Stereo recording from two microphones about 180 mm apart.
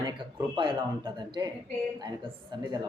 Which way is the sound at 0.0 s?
25° right (ahead or behind).